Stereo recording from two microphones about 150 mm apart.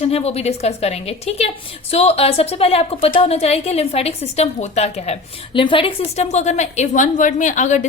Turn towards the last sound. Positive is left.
turn(degrees=55)  # may be behind; listen again after turning